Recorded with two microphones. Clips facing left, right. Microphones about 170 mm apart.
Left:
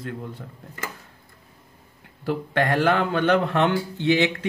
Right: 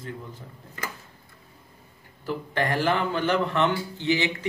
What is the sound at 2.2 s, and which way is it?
A man's voice, 55° left (ahead or behind).